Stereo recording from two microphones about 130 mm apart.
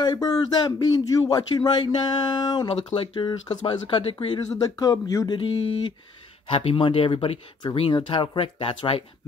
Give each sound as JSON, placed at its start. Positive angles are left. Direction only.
{"t": 0.0, "sound": "speech", "side_deg": 30}
{"t": 4.5, "sound": "speech", "side_deg": 30}
{"t": 5.4, "sound": "speech", "side_deg": 40}